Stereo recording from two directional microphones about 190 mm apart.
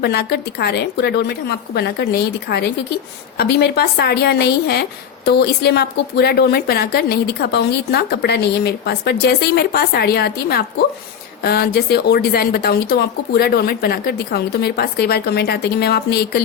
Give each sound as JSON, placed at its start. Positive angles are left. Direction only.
{"t": 0.0, "sound": "a woman's voice", "side_deg": 60}